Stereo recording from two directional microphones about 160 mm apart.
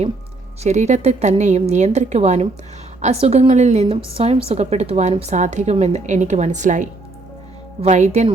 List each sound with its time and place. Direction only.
0.6 s a woman's voice: 45° right (ahead or behind)